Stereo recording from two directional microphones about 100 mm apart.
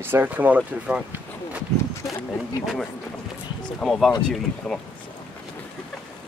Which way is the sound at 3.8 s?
5° left (ahead or behind).